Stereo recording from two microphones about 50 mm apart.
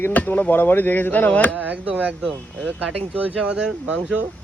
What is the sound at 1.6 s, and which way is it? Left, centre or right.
Speech, right.